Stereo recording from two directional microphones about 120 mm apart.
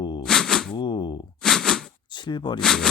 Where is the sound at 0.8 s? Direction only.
40° left (ahead or behind).